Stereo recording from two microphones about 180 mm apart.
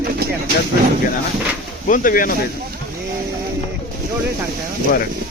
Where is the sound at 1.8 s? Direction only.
50° left (ahead or behind).